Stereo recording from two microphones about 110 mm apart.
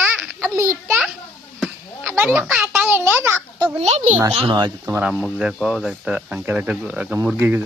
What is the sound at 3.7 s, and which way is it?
Speech, 90° right.